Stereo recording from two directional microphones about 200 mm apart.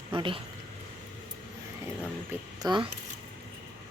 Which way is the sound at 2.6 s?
20° right (ahead or behind).